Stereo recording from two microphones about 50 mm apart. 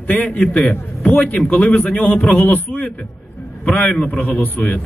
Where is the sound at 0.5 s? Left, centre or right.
Centre.